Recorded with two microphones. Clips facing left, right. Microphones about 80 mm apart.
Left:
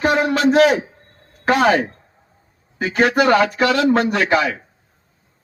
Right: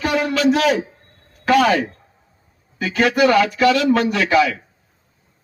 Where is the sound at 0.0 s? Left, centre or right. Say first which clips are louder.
Left 2 dB; left.